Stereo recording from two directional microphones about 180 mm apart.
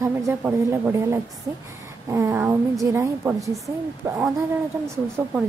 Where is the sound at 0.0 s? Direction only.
15° right (ahead or behind).